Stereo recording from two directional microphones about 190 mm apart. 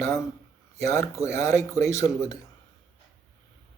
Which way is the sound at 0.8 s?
15° left (ahead or behind).